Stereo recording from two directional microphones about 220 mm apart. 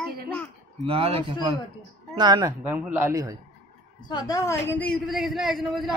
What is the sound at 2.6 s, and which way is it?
Speech, 10° right (ahead or behind).